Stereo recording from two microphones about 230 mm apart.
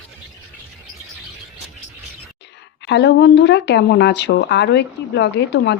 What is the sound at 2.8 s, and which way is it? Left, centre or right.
A woman's voice, left.